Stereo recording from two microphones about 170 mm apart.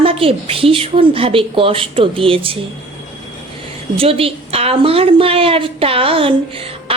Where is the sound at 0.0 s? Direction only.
35° right (ahead or behind).